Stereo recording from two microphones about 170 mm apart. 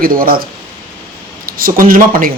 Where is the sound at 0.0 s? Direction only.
55° right (ahead or behind).